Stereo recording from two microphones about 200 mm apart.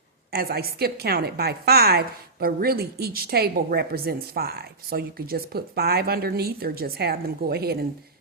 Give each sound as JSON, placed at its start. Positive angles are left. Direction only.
{"t": 0.3, "sound": "a woman's voice", "side_deg": -50}